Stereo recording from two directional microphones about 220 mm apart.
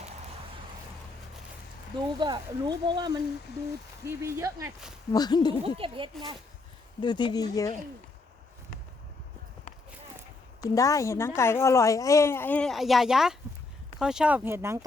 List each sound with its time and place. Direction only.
2.1 s speech: 20° right (ahead or behind)
5.1 s speech: 20° left (ahead or behind)
5.6 s speech: 25° right (ahead or behind)
7.0 s speech: 20° left (ahead or behind)
10.6 s speech: 15° left (ahead or behind); by 14.8 s 10° right (ahead or behind)